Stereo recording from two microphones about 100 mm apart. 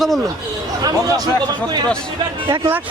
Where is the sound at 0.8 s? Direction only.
40° right (ahead or behind).